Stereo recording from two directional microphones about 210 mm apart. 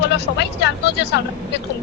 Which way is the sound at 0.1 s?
55° left (ahead or behind).